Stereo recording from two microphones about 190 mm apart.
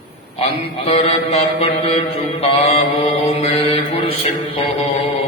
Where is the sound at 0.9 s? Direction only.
30° left (ahead or behind).